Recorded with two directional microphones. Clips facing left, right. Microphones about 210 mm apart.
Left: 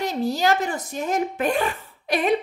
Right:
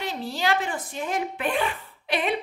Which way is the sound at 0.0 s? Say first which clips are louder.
Left 6 dB; 40° left (ahead or behind).